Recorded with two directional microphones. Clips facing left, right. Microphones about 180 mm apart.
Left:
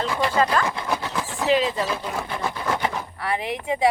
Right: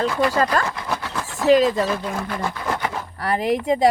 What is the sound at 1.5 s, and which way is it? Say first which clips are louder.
Speech: right 6 dB; 45° right (ahead or behind).